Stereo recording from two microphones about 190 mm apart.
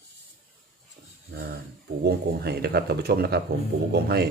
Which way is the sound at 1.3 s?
60° right (ahead or behind).